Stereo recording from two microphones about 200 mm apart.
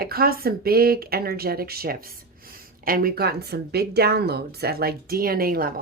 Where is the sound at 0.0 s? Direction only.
50° right (ahead or behind).